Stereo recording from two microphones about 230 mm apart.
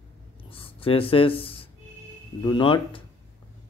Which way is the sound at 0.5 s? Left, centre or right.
Left.